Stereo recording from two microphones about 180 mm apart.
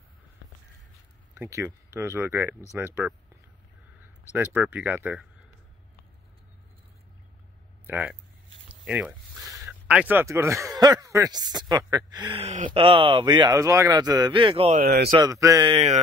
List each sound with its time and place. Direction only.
1.3 s speech: 15° right (ahead or behind)
4.3 s speech: 10° right (ahead or behind)
7.8 s speech: 10° right (ahead or behind)
8.8 s zipper: 5° right (ahead or behind)
9.6 s speech: 10° right (ahead or behind); by 14.7 s 30° right (ahead or behind)
14.8 s speech: 60° right (ahead or behind)
15.0 s speech: 25° right (ahead or behind)
15.7 s mantra: 35° right (ahead or behind)